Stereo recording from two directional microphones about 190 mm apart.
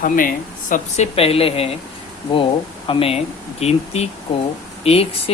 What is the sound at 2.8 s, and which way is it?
Speech, 30° left (ahead or behind).